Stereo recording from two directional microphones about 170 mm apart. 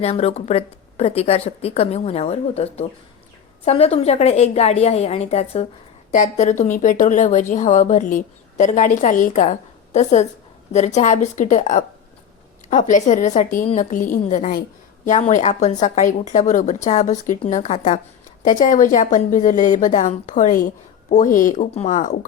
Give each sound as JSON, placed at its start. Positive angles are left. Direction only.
{"t": 0.0, "sound": "a woman's voice", "side_deg": 35}